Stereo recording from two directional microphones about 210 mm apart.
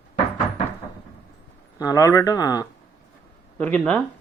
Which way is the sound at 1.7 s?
15° left (ahead or behind).